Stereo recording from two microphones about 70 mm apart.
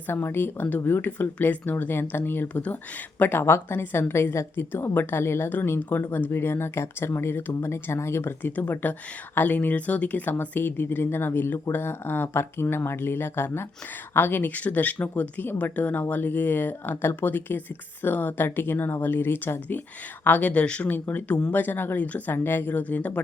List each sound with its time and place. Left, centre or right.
0.1 s a woman's voice: left
3.2 s a woman's voice: left